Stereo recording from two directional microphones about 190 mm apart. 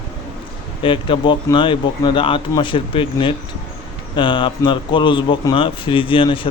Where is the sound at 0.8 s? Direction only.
25° left (ahead or behind).